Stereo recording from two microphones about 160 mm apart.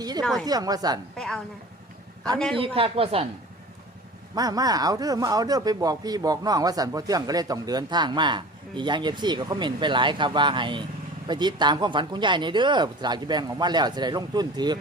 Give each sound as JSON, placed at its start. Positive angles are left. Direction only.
{"t": 0.2, "sound": "a woman's voice", "side_deg": 5}
{"t": 0.4, "sound": "speech", "side_deg": -25}
{"t": 1.1, "sound": "a woman's voice", "side_deg": 5}
{"t": 2.6, "sound": "speech", "side_deg": -35}
{"t": 4.4, "sound": "speech", "side_deg": -25}